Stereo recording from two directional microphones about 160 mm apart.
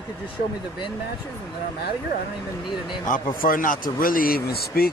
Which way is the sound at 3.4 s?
60° left (ahead or behind).